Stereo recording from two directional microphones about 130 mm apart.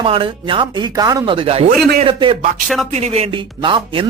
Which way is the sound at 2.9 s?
50° right (ahead or behind).